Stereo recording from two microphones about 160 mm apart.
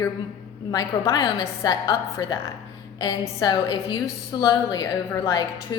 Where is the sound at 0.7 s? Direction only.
25° left (ahead or behind).